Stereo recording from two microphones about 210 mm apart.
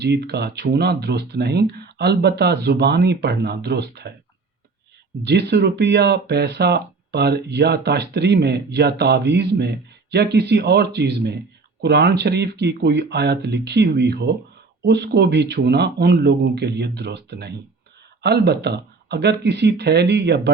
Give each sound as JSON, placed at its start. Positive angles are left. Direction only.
{"t": 0.0, "sound": "speech", "side_deg": -55}
{"t": 5.2, "sound": "speech", "side_deg": -55}